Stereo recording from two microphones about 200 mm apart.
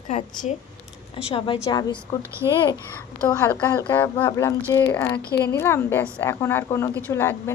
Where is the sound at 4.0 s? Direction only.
10° left (ahead or behind).